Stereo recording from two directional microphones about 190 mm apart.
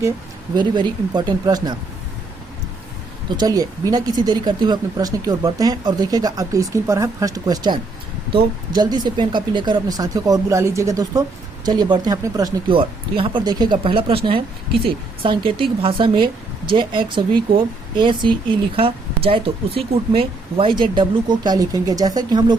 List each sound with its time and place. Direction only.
0.5 s speech: 25° right (ahead or behind)
3.2 s speech: 20° right (ahead or behind)